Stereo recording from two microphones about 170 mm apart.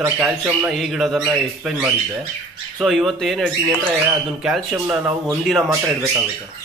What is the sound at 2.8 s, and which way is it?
Speech, centre (ahead or behind).